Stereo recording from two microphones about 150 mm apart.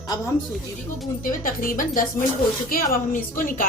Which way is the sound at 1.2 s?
65° left (ahead or behind).